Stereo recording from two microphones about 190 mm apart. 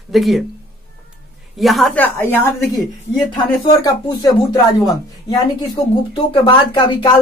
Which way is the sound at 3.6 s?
25° left (ahead or behind).